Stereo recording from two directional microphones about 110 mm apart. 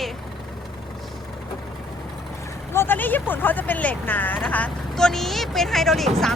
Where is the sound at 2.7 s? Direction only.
20° left (ahead or behind).